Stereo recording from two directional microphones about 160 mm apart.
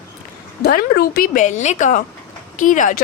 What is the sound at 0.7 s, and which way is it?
A woman's voice, 65° left (ahead or behind).